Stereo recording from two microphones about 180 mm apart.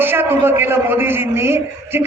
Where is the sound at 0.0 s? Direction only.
10° right (ahead or behind).